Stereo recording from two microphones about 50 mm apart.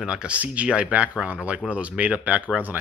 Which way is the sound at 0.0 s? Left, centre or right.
Centre.